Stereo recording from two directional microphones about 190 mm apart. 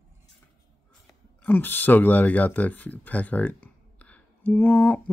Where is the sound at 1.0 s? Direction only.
10° left (ahead or behind).